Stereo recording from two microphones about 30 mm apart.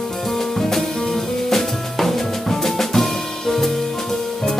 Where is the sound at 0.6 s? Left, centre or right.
Centre.